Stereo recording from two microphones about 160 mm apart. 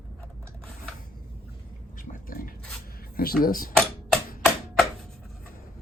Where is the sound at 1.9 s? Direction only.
60° left (ahead or behind).